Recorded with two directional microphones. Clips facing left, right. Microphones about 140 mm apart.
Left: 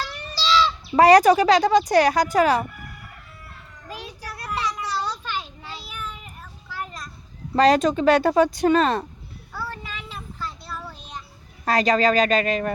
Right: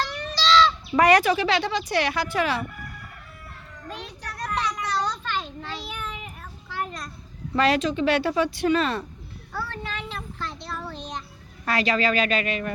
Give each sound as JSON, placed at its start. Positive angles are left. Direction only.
{"t": 0.0, "sound": "a sound", "side_deg": 10}
{"t": 0.9, "sound": "speech", "side_deg": 35}
{"t": 3.8, "sound": "children playing", "side_deg": 10}
{"t": 7.5, "sound": "speech", "side_deg": 40}
{"t": 9.8, "sound": "child singing", "side_deg": 5}
{"t": 11.6, "sound": "speech", "side_deg": 40}